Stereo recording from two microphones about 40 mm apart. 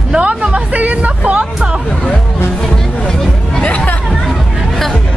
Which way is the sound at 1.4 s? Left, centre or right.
Right.